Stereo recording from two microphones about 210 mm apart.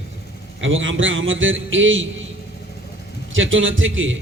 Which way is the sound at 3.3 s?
65° right (ahead or behind).